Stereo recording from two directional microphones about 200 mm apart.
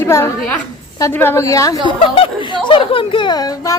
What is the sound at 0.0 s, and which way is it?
A woman's voice, 10° left (ahead or behind).